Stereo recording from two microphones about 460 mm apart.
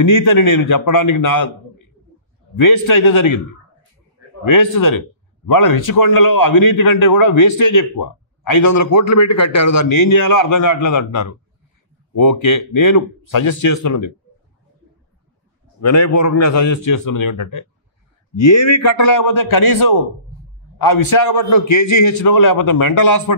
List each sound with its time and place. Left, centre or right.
0.1 s a man's voice: left
2.6 s a man's voice: left
4.5 s a man's voice: left
12.4 s a man's voice: left
15.8 s a man's voice: left